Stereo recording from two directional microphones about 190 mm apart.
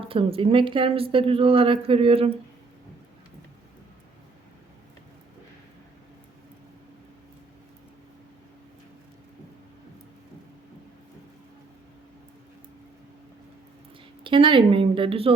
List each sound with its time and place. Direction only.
0.0 s speech: 30° right (ahead or behind)
14.3 s speech: 25° right (ahead or behind)